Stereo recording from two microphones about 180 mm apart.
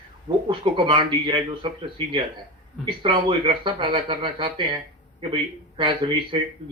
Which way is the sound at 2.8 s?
25° right (ahead or behind).